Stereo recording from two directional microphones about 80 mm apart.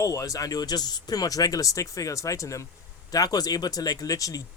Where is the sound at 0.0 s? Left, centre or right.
Left.